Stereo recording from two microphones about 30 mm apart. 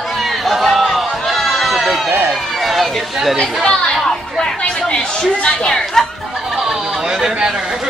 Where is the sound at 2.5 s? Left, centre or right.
Centre.